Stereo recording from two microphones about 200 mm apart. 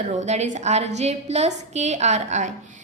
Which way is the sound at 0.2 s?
35° right (ahead or behind).